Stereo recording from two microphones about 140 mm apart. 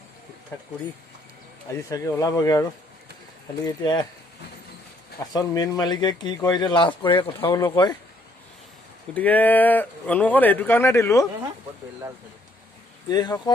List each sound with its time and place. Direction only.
1.9 s speech: 25° left (ahead or behind)
3.7 s speech: 30° left (ahead or behind)
5.2 s speech: 25° left (ahead or behind)
9.1 s speech: 10° left (ahead or behind)
13.1 s speech: 30° left (ahead or behind)